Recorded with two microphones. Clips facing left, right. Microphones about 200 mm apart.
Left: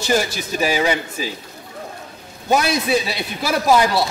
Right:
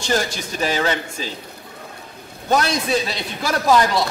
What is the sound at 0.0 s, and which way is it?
A man's voice, 5° left (ahead or behind).